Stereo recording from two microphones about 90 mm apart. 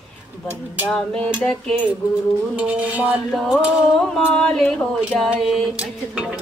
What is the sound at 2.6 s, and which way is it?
Music, 15° right (ahead or behind).